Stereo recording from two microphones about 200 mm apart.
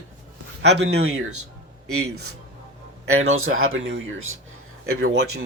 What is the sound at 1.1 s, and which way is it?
Speech, 90° right.